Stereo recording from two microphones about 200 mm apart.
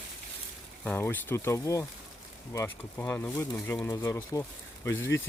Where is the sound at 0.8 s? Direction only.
10° left (ahead or behind).